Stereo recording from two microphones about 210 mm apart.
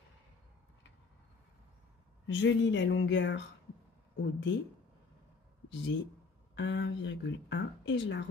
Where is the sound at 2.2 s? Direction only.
60° left (ahead or behind).